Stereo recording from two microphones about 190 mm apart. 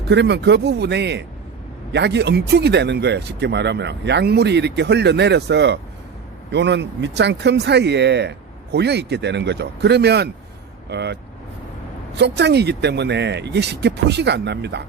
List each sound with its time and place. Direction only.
0.1 s speech: 65° right (ahead or behind)